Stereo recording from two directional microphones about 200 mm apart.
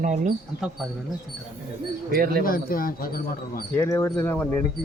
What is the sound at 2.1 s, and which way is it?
Speech, 50° right (ahead or behind).